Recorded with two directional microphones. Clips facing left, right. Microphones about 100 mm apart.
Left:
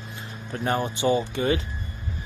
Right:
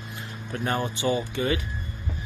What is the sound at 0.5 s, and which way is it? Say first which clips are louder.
Speech: left 2 dB; 25° left (ahead or behind).